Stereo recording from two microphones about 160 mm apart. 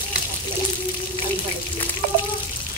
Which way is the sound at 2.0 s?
75° right (ahead or behind).